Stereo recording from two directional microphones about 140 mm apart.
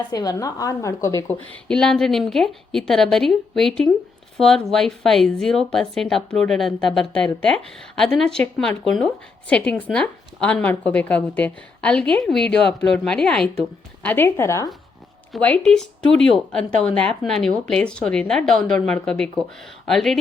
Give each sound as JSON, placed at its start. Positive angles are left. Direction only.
{"t": 0.1, "sound": "a woman's voice", "side_deg": 25}
{"t": 1.6, "sound": "a woman's voice", "side_deg": 5}
{"t": 15.3, "sound": "a woman's voice", "side_deg": 10}